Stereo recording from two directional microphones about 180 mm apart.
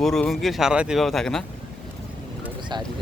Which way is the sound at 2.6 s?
25° right (ahead or behind).